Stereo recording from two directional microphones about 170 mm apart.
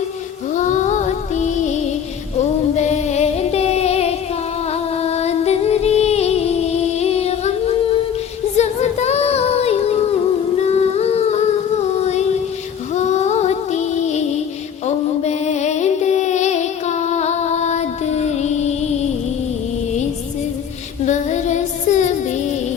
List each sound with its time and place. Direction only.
0.5 s music: 45° left (ahead or behind)
8.5 s female singing: 40° left (ahead or behind)
10.7 s humming: 40° left (ahead or behind)
11.9 s a sound: 40° left (ahead or behind)
21.0 s music: 45° left (ahead or behind)